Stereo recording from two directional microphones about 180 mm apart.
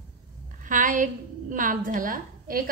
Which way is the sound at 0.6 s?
45° right (ahead or behind).